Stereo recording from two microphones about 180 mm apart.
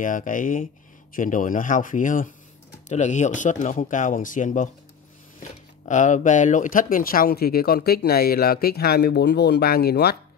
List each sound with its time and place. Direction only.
0.0 s speech: 45° left (ahead or behind)